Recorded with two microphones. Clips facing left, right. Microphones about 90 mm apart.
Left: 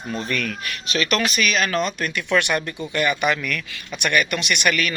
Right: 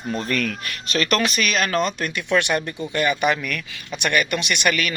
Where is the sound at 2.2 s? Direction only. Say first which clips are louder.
Even; 25° right (ahead or behind).